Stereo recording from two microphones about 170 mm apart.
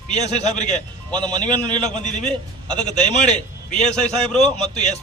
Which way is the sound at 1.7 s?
5° left (ahead or behind).